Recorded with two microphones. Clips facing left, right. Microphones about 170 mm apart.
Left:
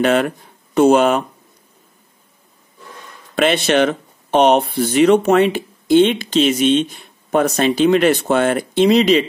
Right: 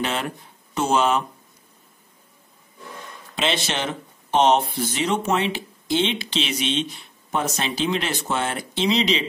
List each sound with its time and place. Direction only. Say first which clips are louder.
0.0 s speech: left 11 dB; 55° left (ahead or behind)
3.3 s speech: left 10 dB; 60° left (ahead or behind)